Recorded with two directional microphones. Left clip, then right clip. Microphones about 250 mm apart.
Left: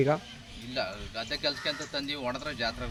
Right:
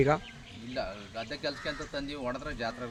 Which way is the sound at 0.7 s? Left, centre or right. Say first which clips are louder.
Left 2 dB; centre.